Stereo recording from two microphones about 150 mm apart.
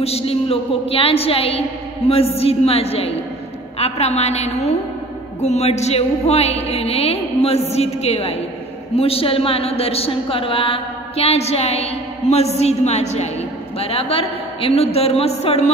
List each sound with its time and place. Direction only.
0.0 s a woman's voice: 40° left (ahead or behind)